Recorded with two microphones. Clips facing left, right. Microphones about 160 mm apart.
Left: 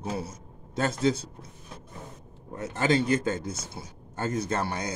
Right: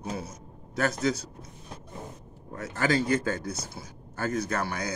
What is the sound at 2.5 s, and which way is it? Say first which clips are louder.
Speech: left 2 dB; 20° left (ahead or behind).